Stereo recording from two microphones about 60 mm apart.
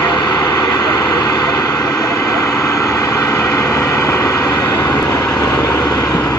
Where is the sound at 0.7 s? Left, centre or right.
Left.